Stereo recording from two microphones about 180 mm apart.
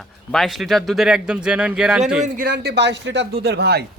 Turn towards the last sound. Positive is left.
turn(degrees=-65)  # may be behind; listen again after turning